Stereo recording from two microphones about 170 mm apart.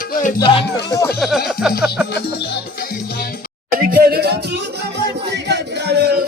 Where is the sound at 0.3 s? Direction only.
30° left (ahead or behind).